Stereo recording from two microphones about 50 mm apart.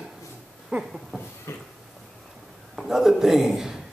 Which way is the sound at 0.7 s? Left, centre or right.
Right.